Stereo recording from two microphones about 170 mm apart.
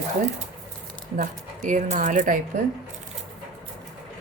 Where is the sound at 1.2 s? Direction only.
45° right (ahead or behind).